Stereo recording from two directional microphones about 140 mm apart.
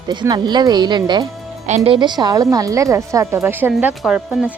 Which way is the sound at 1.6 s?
55° right (ahead or behind).